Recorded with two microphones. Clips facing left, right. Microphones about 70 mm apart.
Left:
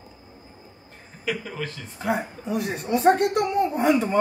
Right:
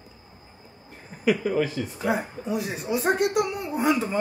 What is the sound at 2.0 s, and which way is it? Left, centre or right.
A woman's voice, centre.